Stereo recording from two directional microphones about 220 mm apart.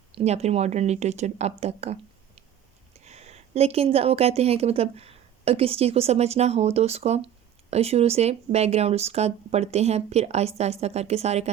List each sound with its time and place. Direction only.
0.1 s a woman's voice: 25° right (ahead or behind)